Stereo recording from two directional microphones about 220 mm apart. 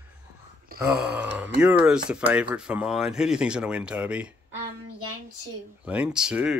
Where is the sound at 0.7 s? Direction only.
40° right (ahead or behind).